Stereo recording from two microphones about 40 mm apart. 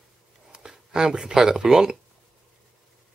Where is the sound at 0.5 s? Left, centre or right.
Centre.